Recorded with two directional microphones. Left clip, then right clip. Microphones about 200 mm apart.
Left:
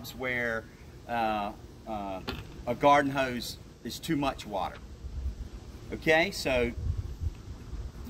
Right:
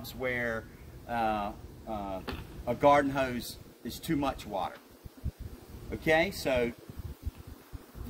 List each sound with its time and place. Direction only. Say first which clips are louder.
0.2 s speech: left 1 dB; 10° right (ahead or behind)
5.9 s speech: left 2 dB; centre (ahead or behind)